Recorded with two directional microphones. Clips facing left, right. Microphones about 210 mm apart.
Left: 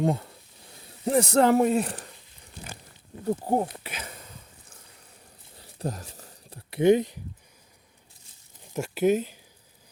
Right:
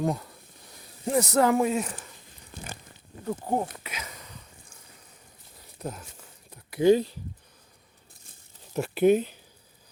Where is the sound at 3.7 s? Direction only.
30° left (ahead or behind).